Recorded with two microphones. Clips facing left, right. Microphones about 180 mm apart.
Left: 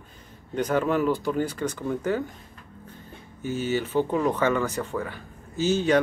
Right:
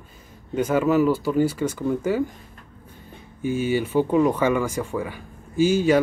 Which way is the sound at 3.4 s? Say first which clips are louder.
Right 4 dB; 10° right (ahead or behind).